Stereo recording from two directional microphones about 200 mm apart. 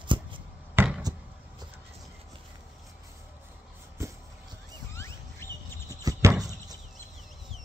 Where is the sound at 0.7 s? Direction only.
5° right (ahead or behind).